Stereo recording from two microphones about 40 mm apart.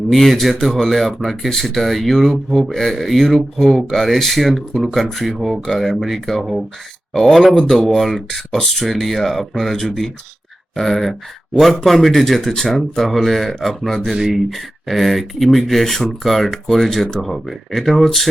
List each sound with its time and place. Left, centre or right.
0.1 s speech: centre
7.1 s speech: centre
7.9 s speech: centre